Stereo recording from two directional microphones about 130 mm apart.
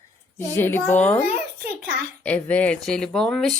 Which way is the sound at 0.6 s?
15° left (ahead or behind).